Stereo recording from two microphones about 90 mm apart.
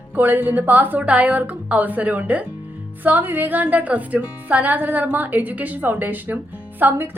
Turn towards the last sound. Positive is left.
turn(degrees=-20)  # may be behind; listen again after turning